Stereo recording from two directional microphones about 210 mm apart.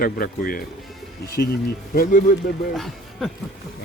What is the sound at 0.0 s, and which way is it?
Speech, 40° left (ahead or behind).